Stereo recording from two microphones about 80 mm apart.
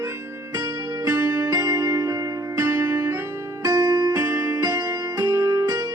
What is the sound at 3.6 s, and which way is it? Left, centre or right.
Music, right.